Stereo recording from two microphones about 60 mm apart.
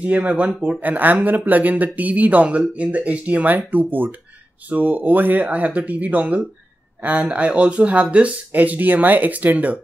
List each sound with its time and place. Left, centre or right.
0.0 s speech: right